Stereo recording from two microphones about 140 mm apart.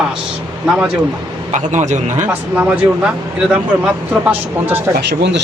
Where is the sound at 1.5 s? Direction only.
60° right (ahead or behind).